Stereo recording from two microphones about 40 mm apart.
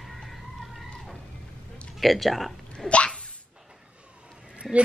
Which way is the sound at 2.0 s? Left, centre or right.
Centre.